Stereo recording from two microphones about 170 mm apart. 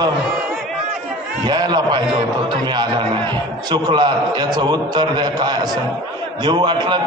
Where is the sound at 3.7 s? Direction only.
25° right (ahead or behind).